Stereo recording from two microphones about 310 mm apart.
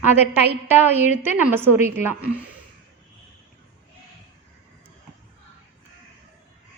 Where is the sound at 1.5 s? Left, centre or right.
Centre.